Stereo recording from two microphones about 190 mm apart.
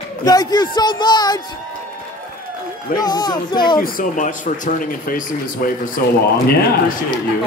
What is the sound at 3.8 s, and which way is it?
Speech, 50° left (ahead or behind).